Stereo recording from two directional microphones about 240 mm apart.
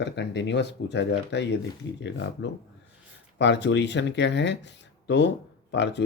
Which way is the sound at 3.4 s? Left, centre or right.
Left.